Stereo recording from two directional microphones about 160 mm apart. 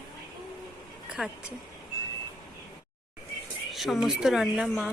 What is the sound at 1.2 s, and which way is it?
Speech, 5° right (ahead or behind).